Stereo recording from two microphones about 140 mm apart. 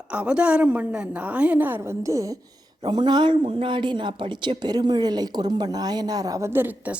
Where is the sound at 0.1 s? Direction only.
10° right (ahead or behind).